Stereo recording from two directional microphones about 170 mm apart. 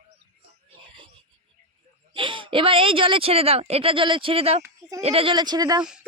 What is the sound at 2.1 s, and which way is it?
Speech, 30° right (ahead or behind).